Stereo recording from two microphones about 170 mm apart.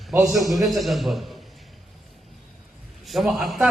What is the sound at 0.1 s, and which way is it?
Speech, 15° right (ahead or behind).